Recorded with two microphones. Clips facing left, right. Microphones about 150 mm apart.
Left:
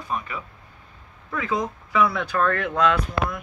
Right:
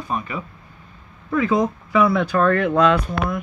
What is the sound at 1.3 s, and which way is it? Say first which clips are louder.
Speech: right 7 dB; 35° right (ahead or behind).